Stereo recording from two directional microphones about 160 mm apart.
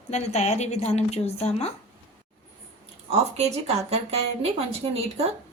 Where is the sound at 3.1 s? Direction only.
40° right (ahead or behind).